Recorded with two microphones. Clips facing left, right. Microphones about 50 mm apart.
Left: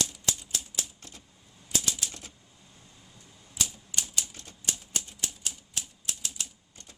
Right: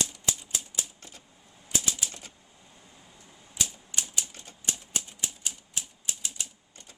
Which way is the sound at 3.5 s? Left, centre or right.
Centre.